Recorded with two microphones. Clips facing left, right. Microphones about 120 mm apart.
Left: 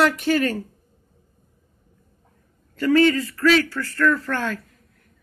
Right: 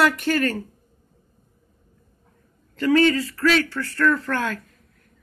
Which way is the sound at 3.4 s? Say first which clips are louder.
Left 3 dB; centre (ahead or behind).